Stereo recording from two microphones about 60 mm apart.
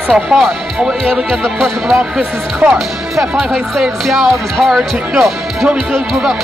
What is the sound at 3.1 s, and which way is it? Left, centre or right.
Speech, centre.